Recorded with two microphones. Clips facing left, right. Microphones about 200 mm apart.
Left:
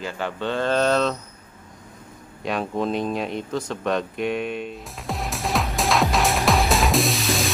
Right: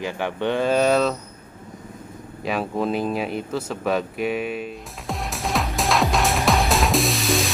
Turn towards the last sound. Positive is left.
turn(degrees=0)  # may be behind; listen again after turning